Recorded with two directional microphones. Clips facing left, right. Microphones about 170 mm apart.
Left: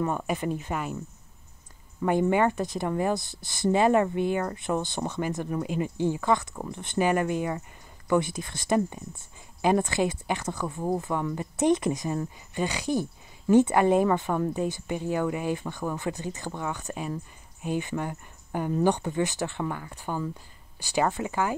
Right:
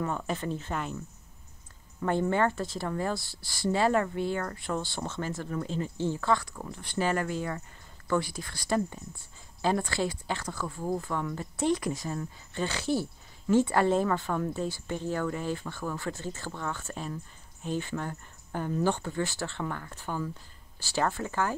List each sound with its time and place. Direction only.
0.0 s speech: 15° left (ahead or behind)
2.0 s speech: 15° left (ahead or behind)